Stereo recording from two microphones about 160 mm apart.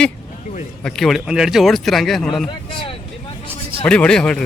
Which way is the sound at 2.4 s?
30° left (ahead or behind).